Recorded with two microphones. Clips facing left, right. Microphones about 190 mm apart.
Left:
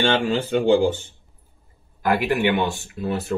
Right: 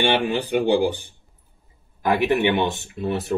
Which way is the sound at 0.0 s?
15° right (ahead or behind).